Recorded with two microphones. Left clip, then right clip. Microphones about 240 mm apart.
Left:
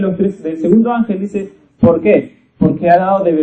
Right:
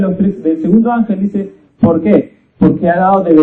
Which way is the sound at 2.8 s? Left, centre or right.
Left.